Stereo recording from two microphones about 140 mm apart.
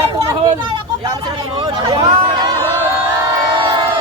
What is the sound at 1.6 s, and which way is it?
Speech, 30° right (ahead or behind).